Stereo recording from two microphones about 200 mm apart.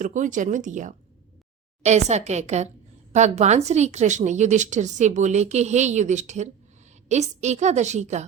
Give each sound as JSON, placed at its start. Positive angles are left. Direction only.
{"t": 0.0, "sound": "speech", "side_deg": -40}